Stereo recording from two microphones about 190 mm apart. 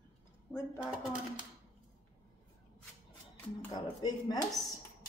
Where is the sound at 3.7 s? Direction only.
20° left (ahead or behind).